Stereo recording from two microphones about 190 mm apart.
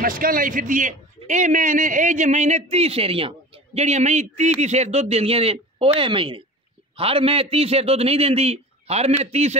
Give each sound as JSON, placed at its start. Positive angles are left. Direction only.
{"t": 0.0, "sound": "a man's voice", "side_deg": -50}